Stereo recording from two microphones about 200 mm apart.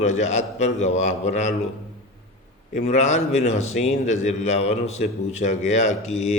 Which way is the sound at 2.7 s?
35° left (ahead or behind).